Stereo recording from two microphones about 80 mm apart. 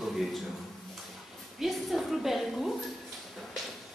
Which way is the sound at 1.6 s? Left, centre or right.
Centre.